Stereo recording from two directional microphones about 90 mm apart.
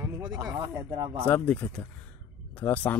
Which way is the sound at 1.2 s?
15° left (ahead or behind).